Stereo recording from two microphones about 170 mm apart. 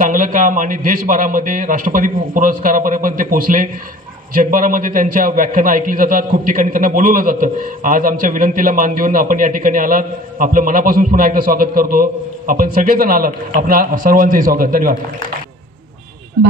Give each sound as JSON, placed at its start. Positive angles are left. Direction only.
{"t": 0.0, "sound": "a man's voice", "side_deg": -50}